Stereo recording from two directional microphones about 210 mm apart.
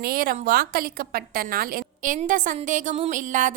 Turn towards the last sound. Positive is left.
turn(degrees=-40)  # may be behind; listen again after turning